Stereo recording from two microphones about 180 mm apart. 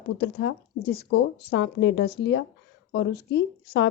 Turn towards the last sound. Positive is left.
turn(degrees=75)  # may be behind; listen again after turning